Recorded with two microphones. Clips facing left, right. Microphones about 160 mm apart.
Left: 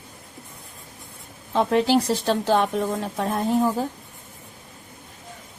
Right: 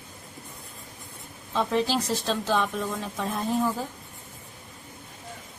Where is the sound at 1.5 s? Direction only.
60° left (ahead or behind).